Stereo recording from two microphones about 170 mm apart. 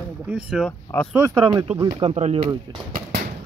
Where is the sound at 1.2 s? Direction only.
25° right (ahead or behind).